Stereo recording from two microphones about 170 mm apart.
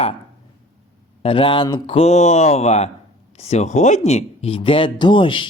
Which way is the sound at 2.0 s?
40° left (ahead or behind).